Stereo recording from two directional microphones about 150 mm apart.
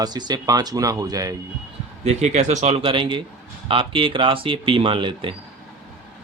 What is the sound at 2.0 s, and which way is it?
A man's voice, 50° right (ahead or behind).